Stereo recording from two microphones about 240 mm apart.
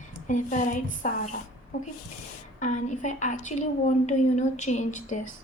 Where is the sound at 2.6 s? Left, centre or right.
Left.